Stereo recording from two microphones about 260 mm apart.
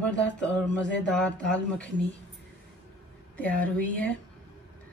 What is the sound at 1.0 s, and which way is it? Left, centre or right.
A woman's voice, centre.